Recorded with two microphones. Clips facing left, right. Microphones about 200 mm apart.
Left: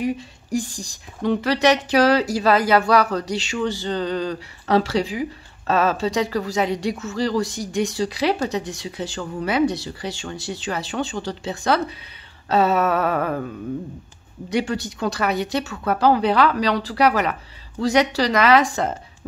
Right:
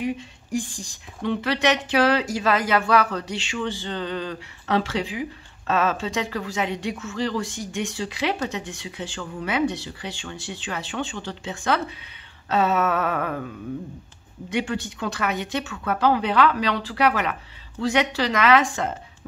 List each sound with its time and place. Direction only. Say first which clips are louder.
0.0 s speech: left 3 dB; 40° left (ahead or behind)
14.5 s speech: left 3 dB; 40° left (ahead or behind)